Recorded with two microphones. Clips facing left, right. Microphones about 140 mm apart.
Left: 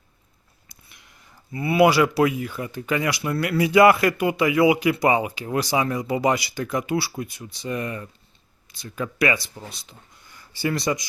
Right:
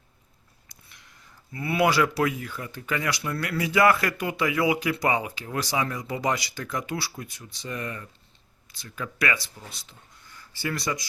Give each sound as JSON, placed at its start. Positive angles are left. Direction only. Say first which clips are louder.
{"t": 0.7, "sound": "a sound", "louder": "left 2 dB", "side_deg": 10}
{"t": 1.5, "sound": "speech", "louder": "left 5 dB", "side_deg": 15}
{"t": 10.6, "sound": "speech", "louder": "left 6 dB", "side_deg": 20}